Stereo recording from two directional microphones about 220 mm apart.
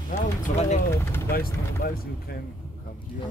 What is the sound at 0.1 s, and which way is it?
Speech, 30° left (ahead or behind).